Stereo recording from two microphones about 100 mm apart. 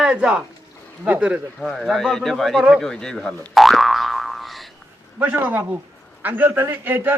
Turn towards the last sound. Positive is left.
turn(degrees=-20)  # may be behind; listen again after turning